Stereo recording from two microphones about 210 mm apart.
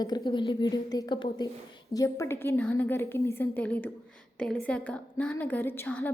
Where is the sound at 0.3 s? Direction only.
20° left (ahead or behind).